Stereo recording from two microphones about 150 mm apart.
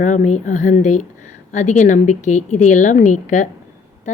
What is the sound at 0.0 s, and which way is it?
A woman's voice, 55° left (ahead or behind).